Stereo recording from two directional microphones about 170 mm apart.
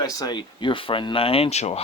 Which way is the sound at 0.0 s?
20° left (ahead or behind).